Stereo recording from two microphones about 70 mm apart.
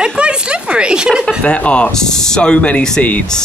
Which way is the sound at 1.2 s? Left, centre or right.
Centre.